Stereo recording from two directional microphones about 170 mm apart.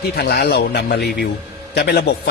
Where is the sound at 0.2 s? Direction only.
65° left (ahead or behind).